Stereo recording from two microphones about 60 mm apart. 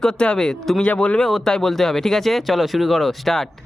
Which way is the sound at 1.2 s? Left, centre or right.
Centre.